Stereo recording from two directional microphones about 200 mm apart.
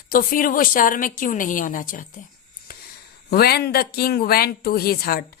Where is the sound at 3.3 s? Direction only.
50° left (ahead or behind).